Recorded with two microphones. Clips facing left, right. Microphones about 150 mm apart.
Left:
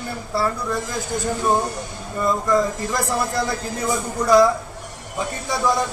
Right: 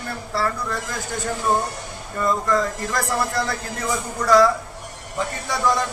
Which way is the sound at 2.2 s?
15° left (ahead or behind).